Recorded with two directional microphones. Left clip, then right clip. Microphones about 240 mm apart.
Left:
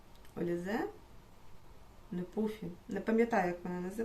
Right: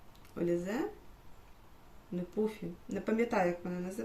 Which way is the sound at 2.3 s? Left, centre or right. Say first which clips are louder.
Right 3 dB; centre.